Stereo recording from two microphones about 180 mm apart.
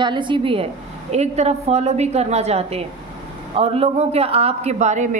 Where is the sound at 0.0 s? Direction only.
25° right (ahead or behind).